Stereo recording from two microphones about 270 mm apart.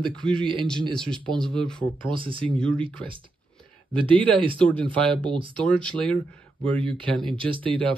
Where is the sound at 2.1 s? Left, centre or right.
Centre.